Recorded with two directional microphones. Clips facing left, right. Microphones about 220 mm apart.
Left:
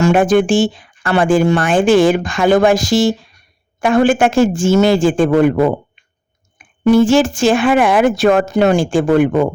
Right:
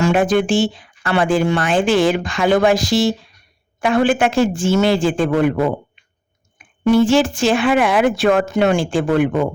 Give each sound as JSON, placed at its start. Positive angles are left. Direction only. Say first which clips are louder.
{"t": 0.0, "sound": "speech", "louder": "left 4 dB", "side_deg": 50}
{"t": 6.8, "sound": "speech", "louder": "left 3 dB", "side_deg": 45}